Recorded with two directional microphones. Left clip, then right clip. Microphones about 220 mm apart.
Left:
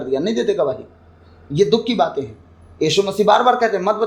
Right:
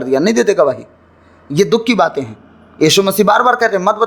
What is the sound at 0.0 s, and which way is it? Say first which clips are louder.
A man's voice: right 7 dB; 30° right (ahead or behind).